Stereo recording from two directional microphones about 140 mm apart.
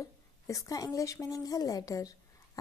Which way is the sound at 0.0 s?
25° left (ahead or behind).